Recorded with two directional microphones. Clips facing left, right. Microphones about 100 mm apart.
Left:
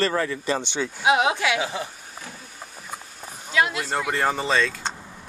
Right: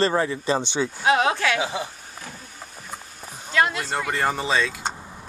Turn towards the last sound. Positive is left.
turn(degrees=-10)  # may be behind; listen again after turning